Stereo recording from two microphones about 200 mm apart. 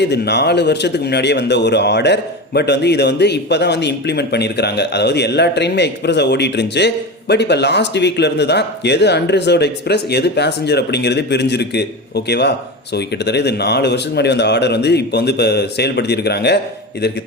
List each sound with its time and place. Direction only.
0.0 s a man's voice: 55° left (ahead or behind)